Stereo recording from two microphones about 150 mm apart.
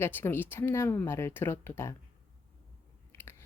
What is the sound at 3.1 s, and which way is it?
Chewing, 15° left (ahead or behind).